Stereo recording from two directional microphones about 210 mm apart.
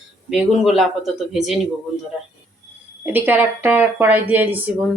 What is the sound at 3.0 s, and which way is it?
A woman's voice, 10° right (ahead or behind).